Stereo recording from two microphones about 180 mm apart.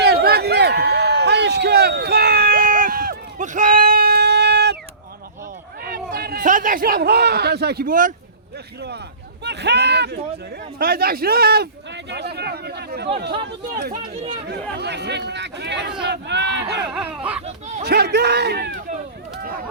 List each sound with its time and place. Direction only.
0.0 s a sound: 60° right (ahead or behind)
5.8 s a man's voice: 55° right (ahead or behind)
9.4 s speech: 70° right (ahead or behind)
10.8 s speech: 55° right (ahead or behind)
13.9 s speech: 35° right (ahead or behind)
14.4 s speech: 65° right (ahead or behind)
16.9 s speech: 5° right (ahead or behind)
17.4 s speech: 40° right (ahead or behind)
17.8 s speech: 65° right (ahead or behind)